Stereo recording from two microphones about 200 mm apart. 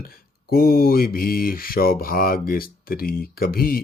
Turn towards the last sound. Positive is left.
turn(degrees=50)  # may be behind; listen again after turning